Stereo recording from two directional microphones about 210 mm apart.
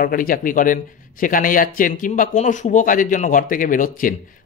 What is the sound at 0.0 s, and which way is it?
Speech, 40° left (ahead or behind).